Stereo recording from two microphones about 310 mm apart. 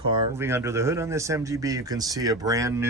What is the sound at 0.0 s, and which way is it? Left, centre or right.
A man's voice, centre.